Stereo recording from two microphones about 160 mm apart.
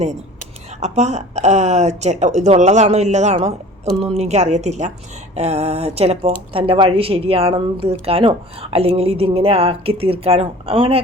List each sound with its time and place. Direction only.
0.8 s a woman's voice: 45° right (ahead or behind)